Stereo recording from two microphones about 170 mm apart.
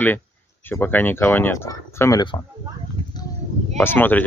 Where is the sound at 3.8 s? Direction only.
10° left (ahead or behind).